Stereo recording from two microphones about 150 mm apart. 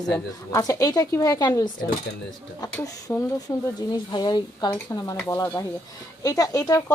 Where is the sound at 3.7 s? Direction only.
30° left (ahead or behind).